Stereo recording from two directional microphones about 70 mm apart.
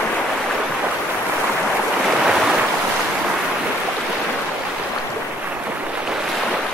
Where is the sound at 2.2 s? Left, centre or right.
Centre.